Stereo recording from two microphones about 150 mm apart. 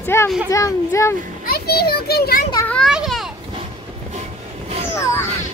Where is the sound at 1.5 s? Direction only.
90° left.